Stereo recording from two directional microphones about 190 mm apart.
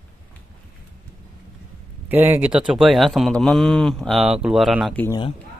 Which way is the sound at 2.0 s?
10° right (ahead or behind).